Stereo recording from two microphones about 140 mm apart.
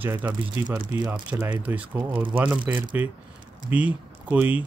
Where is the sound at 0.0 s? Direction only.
15° right (ahead or behind).